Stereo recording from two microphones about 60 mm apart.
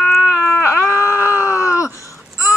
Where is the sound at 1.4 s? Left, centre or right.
Left.